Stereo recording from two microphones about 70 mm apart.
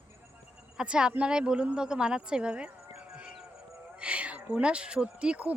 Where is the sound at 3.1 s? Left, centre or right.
Centre.